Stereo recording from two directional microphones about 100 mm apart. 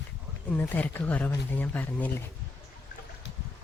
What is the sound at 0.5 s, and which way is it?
Speech, 20° left (ahead or behind).